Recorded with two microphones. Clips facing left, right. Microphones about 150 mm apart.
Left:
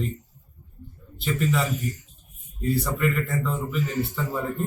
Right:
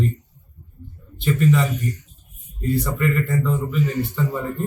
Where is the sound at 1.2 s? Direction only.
Centre (ahead or behind).